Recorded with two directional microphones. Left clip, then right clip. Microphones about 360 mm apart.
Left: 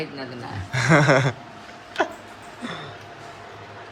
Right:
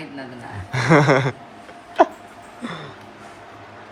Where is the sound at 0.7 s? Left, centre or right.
Centre.